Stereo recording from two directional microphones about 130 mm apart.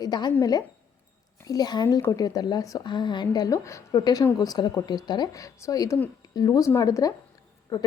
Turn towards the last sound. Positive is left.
turn(degrees=30)  # may be behind; listen again after turning